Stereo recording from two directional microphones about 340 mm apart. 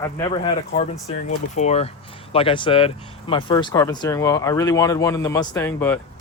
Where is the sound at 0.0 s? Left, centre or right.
Centre.